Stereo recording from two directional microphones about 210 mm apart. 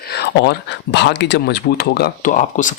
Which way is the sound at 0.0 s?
50° left (ahead or behind).